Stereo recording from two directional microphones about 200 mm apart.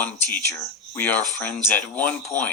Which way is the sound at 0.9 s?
10° left (ahead or behind).